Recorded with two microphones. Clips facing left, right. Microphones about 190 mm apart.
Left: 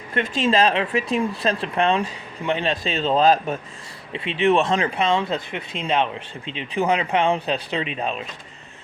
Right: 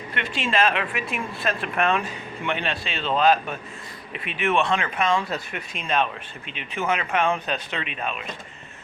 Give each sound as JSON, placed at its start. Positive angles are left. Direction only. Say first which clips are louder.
{"t": 0.1, "sound": "speech", "louder": "left 6 dB", "side_deg": 40}